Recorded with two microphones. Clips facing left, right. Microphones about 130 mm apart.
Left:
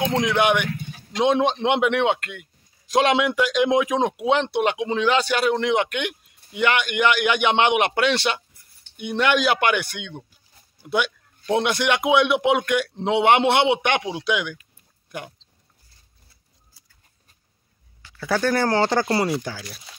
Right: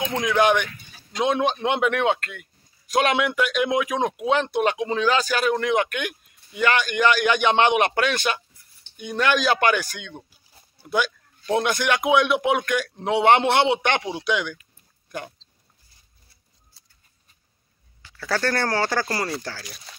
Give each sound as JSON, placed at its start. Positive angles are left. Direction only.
{"t": 0.0, "sound": "speech", "side_deg": 20}
{"t": 16.8, "sound": "a sound", "side_deg": 10}
{"t": 18.2, "sound": "speech", "side_deg": 10}
{"t": 18.8, "sound": "speech", "side_deg": 25}